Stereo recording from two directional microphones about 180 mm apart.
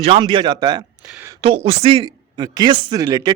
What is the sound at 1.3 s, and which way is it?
Speech, 35° right (ahead or behind).